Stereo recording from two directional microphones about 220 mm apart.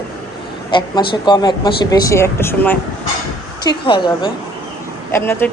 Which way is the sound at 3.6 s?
20° left (ahead or behind).